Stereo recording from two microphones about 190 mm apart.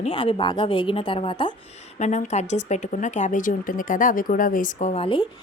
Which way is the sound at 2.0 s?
35° left (ahead or behind).